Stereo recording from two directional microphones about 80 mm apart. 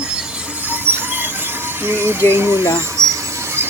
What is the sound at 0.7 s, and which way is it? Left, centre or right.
Music, right.